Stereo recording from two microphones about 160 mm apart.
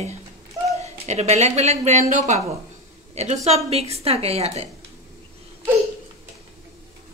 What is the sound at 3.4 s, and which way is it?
A woman's voice, 40° right (ahead or behind).